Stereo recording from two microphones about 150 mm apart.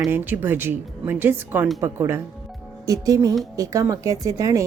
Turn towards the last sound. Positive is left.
turn(degrees=-20)  # may be behind; listen again after turning